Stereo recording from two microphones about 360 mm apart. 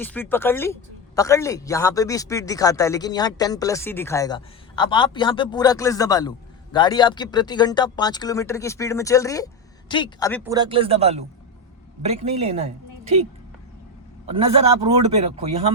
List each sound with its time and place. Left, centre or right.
0.0 s speech: centre
10.4 s a man's voice: centre
14.3 s a man's voice: centre